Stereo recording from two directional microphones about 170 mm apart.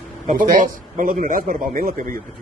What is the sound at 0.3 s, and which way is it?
A man's voice, 50° right (ahead or behind).